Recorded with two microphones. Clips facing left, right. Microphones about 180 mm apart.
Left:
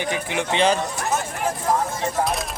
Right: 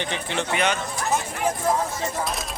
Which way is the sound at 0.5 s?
30° left (ahead or behind).